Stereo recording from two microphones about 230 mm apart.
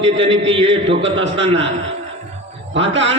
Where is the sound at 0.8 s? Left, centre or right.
Right.